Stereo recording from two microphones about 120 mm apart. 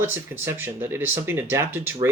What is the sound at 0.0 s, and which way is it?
Speech, 20° right (ahead or behind).